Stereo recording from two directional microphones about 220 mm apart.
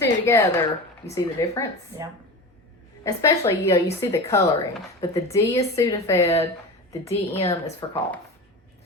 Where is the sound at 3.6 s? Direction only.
15° left (ahead or behind).